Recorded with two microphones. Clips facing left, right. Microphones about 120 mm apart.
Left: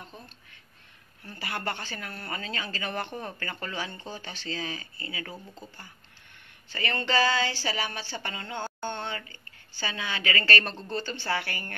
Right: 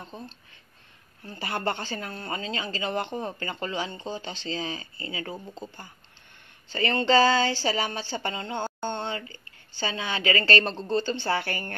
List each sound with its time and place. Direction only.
0.1 s speech: 30° right (ahead or behind)